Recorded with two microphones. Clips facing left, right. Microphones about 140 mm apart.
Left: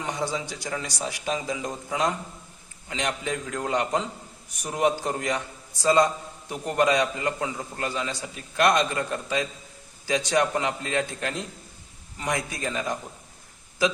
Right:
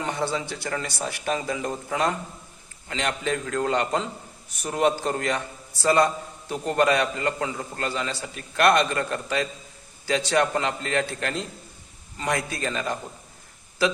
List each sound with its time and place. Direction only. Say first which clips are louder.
0.3 s a man's voice: right 2 dB; 15° left (ahead or behind)
1.1 s speech: right 2 dB; 60° right (ahead or behind)
1.4 s a man's voice: right 2 dB; 10° left (ahead or behind)
12.5 s a man's voice: right 1 dB; 15° left (ahead or behind)